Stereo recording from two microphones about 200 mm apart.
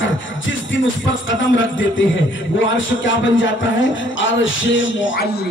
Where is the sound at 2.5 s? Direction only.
70° left (ahead or behind).